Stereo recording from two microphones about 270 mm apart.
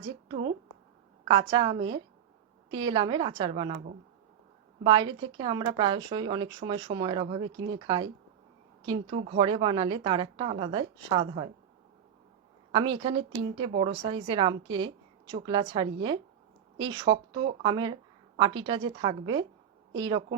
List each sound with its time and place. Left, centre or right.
0.0 s a woman's voice: centre
12.7 s speech: centre